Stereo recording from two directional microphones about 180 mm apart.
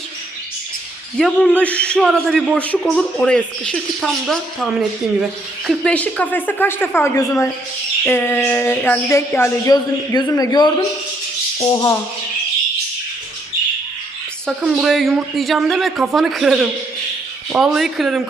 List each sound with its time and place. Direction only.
1.2 s a man's voice: 10° left (ahead or behind)
5.6 s a sound: 5° left (ahead or behind); by 11.9 s 20° left (ahead or behind)
14.6 s a man's voice: centre (ahead or behind)